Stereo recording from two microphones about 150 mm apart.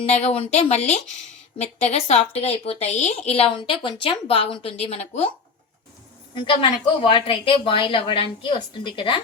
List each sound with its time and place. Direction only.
0.0 s a woman's voice: 45° left (ahead or behind)
6.3 s a woman's voice: 35° left (ahead or behind)